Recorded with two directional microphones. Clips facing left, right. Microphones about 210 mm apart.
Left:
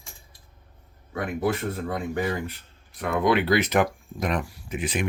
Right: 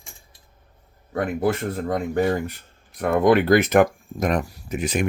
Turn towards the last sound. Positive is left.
turn(degrees=-45)  # may be behind; listen again after turning